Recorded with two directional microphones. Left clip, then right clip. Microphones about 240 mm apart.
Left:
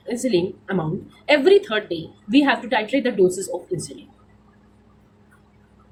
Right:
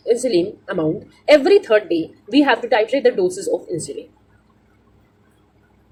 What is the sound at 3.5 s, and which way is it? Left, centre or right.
Speech, centre.